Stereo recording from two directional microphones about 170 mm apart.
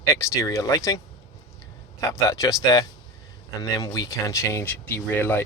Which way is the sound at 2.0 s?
20° left (ahead or behind).